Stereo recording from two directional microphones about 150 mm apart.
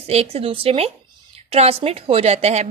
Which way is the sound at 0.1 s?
40° right (ahead or behind).